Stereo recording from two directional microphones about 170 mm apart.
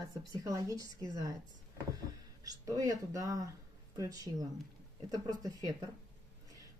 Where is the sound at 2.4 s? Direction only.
20° right (ahead or behind).